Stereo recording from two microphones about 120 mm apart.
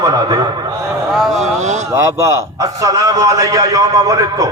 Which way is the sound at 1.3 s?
70° right (ahead or behind).